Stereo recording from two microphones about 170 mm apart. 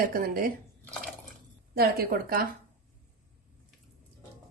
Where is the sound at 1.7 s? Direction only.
65° right (ahead or behind).